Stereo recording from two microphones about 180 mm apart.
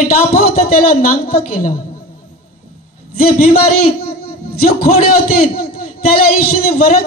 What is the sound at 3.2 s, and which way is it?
A man's voice, 55° left (ahead or behind).